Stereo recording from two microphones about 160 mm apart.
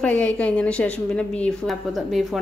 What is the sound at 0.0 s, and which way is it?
A woman's voice, 10° left (ahead or behind).